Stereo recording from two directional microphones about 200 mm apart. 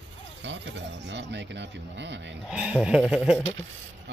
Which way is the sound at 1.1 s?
60° right (ahead or behind).